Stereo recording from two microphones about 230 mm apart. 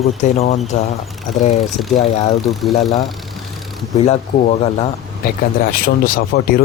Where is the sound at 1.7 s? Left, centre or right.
Centre.